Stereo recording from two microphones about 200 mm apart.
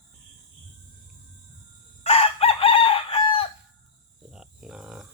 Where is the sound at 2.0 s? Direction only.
30° left (ahead or behind).